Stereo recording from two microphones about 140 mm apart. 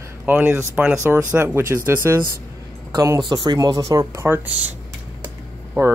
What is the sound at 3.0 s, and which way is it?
Speech, 25° right (ahead or behind).